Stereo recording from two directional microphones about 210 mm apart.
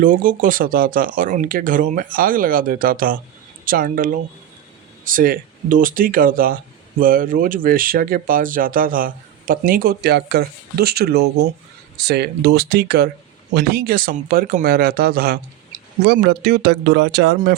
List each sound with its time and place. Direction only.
0.0 s speech: 40° right (ahead or behind)